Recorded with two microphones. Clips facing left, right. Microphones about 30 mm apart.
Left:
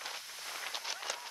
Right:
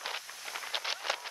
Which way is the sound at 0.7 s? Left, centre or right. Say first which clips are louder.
Right 9 dB; right.